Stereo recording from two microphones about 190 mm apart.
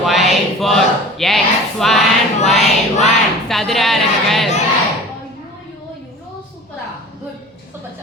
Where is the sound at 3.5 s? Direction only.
Centre (ahead or behind).